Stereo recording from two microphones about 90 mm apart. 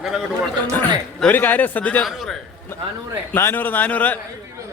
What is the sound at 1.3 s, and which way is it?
Speech, 20° left (ahead or behind).